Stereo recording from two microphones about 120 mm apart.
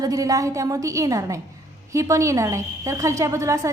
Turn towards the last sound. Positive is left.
turn(degrees=-25)  # may be behind; listen again after turning